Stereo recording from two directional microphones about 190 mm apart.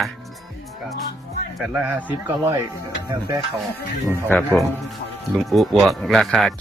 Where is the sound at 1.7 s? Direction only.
10° right (ahead or behind).